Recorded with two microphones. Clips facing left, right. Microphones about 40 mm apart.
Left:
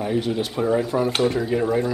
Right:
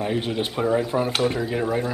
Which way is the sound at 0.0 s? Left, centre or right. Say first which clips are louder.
Left 1 dB; right.